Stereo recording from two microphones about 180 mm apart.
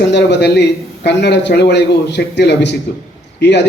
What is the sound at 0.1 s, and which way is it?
A man's voice, 65° left (ahead or behind).